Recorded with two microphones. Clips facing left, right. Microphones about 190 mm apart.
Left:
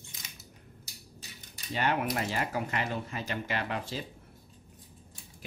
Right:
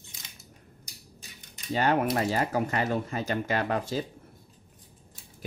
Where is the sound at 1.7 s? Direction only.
40° right (ahead or behind).